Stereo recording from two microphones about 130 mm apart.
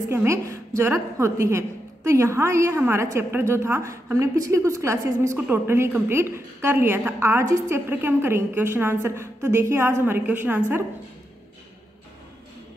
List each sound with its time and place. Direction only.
0.1 s a woman's voice: 20° right (ahead or behind)